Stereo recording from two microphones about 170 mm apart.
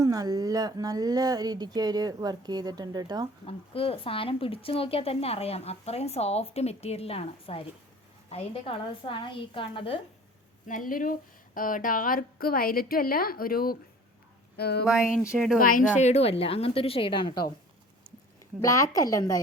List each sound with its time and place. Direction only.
0.0 s speech: 20° right (ahead or behind)
3.4 s speech: 35° left (ahead or behind)
10.7 s a woman's voice: 50° left (ahead or behind)
14.5 s speech: 70° left (ahead or behind)
14.8 s speech: 5° right (ahead or behind)
15.6 s speech: 50° left (ahead or behind); by 17.3 s 30° left (ahead or behind)
18.6 s a woman's voice: 20° left (ahead or behind)